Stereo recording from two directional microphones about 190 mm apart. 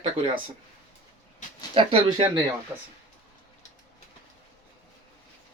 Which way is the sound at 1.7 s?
30° right (ahead or behind).